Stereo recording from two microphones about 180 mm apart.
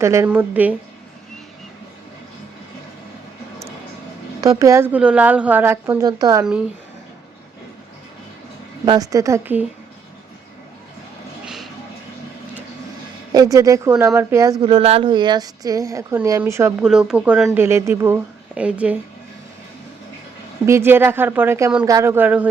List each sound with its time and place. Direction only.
0.0 s speech: 15° right (ahead or behind)
4.4 s speech: 20° right (ahead or behind)
6.4 s speech: 5° right (ahead or behind)
8.8 s speech: 20° right (ahead or behind)
11.4 s vehicle: centre (ahead or behind)
13.3 s speech: 20° right (ahead or behind)
14.6 s speech: 30° right (ahead or behind)
16.8 s speech: 5° right (ahead or behind)
20.7 s speech: 15° right (ahead or behind)